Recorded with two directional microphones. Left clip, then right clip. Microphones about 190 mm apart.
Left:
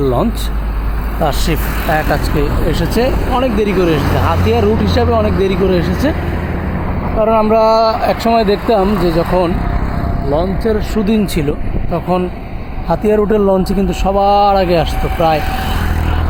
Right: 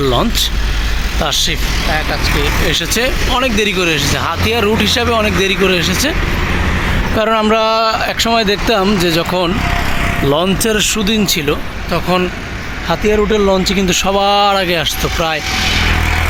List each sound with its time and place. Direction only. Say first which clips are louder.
0.0 s speech: right 1 dB; 15° right (ahead or behind)
1.2 s speech: right 1 dB; 10° left (ahead or behind)
2.6 s speech: right 1 dB; 5° left (ahead or behind)
7.2 s speech: left 2 dB; 15° right (ahead or behind)
10.3 s speech: left 1 dB; 20° right (ahead or behind)
11.0 s speech: right 2 dB; 10° left (ahead or behind)
12.9 s speech: left 1 dB; 15° left (ahead or behind)
13.7 s speech: right 1 dB; 5° left (ahead or behind)